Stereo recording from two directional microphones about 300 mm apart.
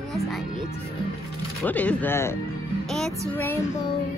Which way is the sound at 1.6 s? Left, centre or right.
Centre.